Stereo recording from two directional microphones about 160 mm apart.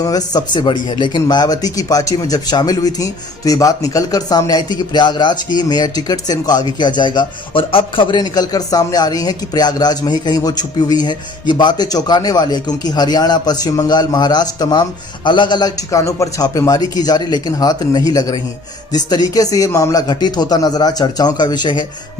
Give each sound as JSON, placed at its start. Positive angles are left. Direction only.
{"t": 0.0, "sound": "speech", "side_deg": 25}